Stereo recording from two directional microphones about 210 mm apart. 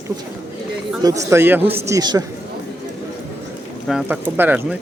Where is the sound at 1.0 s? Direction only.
15° right (ahead or behind).